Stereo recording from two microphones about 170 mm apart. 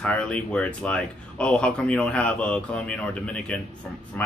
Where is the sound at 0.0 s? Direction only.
10° left (ahead or behind).